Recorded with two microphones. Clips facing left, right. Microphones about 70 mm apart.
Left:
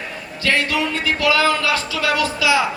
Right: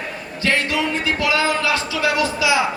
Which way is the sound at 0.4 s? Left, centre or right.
Right.